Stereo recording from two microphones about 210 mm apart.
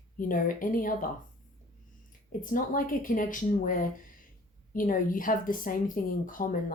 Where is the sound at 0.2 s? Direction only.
40° left (ahead or behind).